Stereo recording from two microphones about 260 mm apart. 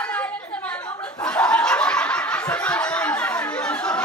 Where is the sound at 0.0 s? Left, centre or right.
Centre.